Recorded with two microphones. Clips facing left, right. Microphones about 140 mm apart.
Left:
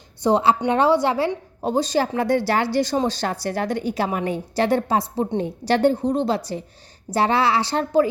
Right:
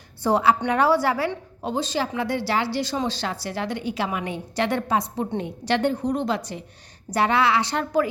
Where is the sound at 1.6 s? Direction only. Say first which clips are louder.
Left 5 dB; 40° left (ahead or behind).